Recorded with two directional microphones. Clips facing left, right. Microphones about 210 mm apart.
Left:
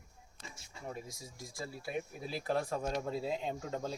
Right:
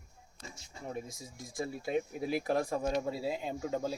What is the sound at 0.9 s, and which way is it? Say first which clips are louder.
Speech: right 4 dB; 20° right (ahead or behind).